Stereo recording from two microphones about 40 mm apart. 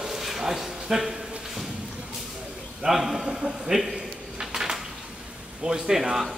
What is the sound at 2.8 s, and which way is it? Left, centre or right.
Speech, centre.